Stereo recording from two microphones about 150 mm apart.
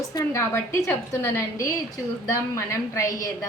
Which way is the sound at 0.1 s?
20° left (ahead or behind).